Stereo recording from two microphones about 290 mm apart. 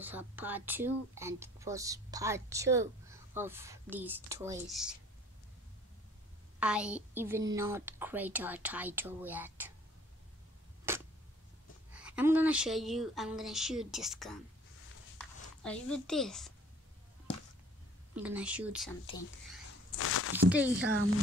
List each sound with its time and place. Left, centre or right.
0.0 s speech: centre
6.6 s speech: centre
10.9 s a sound: centre
11.9 s speech: centre
18.1 s speech: centre
20.0 s a sound: left
20.3 s speech: centre
20.8 s speech: right